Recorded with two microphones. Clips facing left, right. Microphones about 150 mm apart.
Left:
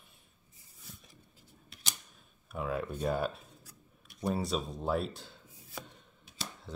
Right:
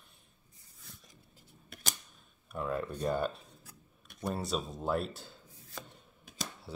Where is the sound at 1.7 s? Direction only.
55° right (ahead or behind).